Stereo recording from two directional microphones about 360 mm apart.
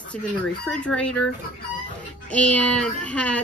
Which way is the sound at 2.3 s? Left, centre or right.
Centre.